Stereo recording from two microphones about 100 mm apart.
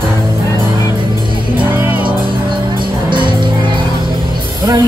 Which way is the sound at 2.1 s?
55° right (ahead or behind).